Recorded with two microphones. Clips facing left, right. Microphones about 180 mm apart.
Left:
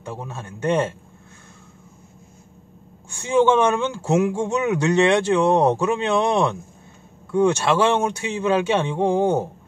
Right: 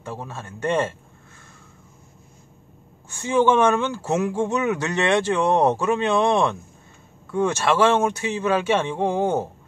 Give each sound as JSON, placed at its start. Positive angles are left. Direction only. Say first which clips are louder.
{"t": 0.0, "sound": "speech", "louder": "left 1 dB", "side_deg": 15}
{"t": 3.5, "sound": "speech", "louder": "even", "side_deg": 15}